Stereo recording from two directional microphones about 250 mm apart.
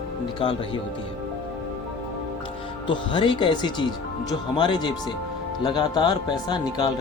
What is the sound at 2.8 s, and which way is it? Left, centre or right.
Speech, centre.